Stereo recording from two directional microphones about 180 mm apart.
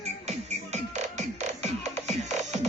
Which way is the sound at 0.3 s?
40° right (ahead or behind).